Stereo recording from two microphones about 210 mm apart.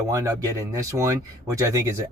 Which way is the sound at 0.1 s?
15° right (ahead or behind).